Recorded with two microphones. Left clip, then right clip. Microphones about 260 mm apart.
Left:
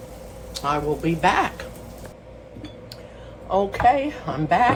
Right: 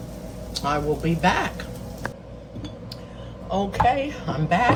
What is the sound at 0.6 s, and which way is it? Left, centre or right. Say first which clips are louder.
Dishes: left 1 dB; left.